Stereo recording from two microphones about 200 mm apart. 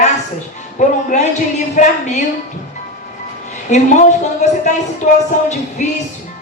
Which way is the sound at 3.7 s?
35° left (ahead or behind).